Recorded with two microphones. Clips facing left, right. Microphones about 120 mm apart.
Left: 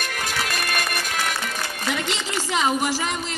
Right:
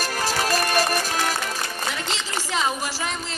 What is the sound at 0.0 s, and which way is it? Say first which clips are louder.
Music: right 3 dB; 35° right (ahead or behind).